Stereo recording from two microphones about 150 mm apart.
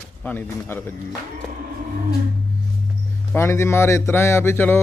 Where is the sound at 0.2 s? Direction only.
10° left (ahead or behind).